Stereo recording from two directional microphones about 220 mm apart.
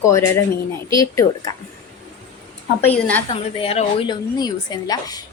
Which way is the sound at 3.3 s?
25° left (ahead or behind).